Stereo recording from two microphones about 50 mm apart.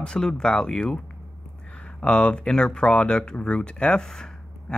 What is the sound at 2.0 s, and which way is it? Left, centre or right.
Speech, centre.